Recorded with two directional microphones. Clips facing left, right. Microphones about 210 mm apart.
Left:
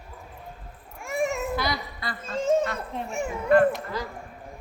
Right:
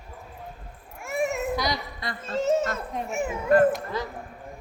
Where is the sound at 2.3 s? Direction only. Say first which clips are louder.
Even; centre (ahead or behind).